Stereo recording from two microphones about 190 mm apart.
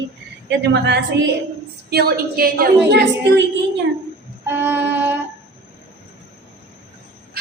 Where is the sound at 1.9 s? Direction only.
55° right (ahead or behind).